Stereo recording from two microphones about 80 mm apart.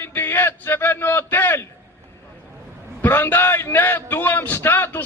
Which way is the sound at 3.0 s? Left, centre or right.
Left.